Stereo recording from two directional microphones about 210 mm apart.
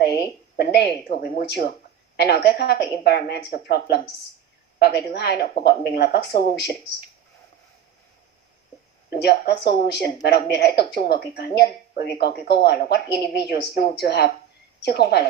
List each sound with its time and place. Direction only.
0.0 s a sound: 50° left (ahead or behind)
2.1 s speech: 50° left (ahead or behind)
9.2 s speech: 50° left (ahead or behind)